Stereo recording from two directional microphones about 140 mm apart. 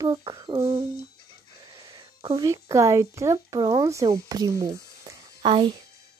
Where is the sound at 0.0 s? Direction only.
30° right (ahead or behind).